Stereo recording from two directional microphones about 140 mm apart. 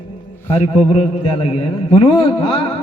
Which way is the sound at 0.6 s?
45° left (ahead or behind).